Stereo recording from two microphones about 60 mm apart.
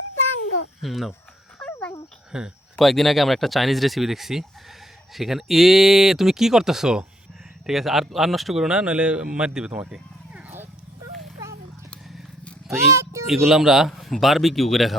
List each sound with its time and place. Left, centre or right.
0.8 s speech: centre
2.3 s speech: centre
2.7 s speech: centre
12.7 s speech: right
13.2 s speech: centre